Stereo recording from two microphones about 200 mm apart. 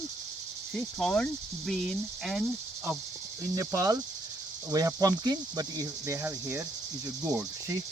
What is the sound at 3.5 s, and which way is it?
Speech, 15° right (ahead or behind).